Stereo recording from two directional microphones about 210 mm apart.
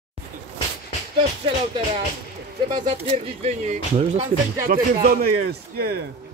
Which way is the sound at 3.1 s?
30° right (ahead or behind).